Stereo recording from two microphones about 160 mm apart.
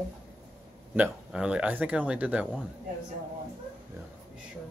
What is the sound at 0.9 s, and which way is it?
Speech, 10° right (ahead or behind).